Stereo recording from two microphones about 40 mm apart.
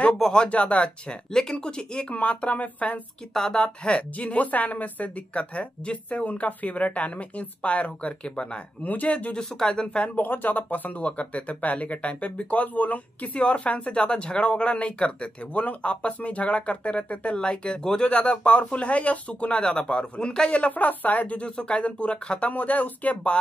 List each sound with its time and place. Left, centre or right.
0.5 s speech: left
2.1 s speech: left
3.5 s speech: left
5.3 s speech: left
8.8 s speech: left
9.4 s speech: left
10.1 s speech: left
11.0 s speech: left
19.6 s speech: left
20.7 s speech: left
22.5 s speech: left